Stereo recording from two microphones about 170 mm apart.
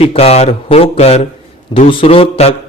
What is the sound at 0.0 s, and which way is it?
A man's voice, 35° left (ahead or behind).